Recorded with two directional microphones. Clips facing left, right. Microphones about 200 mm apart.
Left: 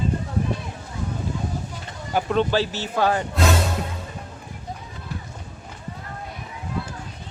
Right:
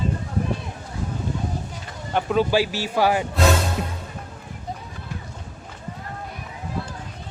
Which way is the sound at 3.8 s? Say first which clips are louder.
Right 1 dB; 20° right (ahead or behind).